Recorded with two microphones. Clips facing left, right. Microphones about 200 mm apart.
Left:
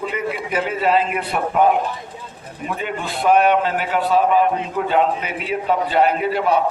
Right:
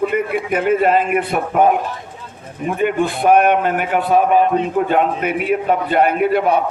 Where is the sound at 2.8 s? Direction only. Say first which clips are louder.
Right 10 dB; 55° right (ahead or behind).